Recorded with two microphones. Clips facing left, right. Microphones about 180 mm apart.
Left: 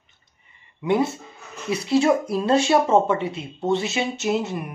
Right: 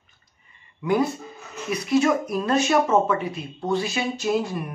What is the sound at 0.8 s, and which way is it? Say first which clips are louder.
Speech: left 1 dB; 25° left (ahead or behind).